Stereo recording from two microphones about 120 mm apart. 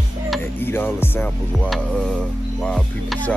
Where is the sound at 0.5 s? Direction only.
15° left (ahead or behind).